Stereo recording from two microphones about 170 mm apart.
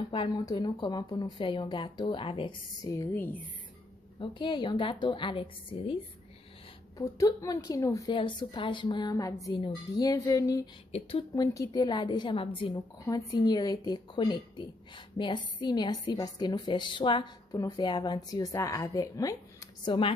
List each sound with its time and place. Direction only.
0.1 s a woman's voice: 30° left (ahead or behind); by 3.4 s 10° left (ahead or behind)
4.2 s a woman's voice: 30° left (ahead or behind)
7.0 s a woman's voice: 20° left (ahead or behind)
10.9 s a woman's voice: 35° left (ahead or behind)
11.3 s a woman's voice: 20° left (ahead or behind)
19.8 s a woman's voice: 30° left (ahead or behind)